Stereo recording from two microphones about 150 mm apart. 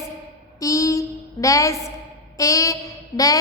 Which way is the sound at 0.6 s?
20° left (ahead or behind).